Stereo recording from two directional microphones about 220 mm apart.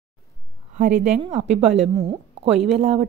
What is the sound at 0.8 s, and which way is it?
Speech, 35° right (ahead or behind).